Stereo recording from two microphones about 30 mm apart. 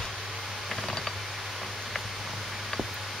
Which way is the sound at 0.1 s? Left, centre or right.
Centre.